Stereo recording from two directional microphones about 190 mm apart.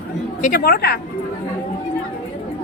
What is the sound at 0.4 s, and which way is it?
Speech, 50° left (ahead or behind).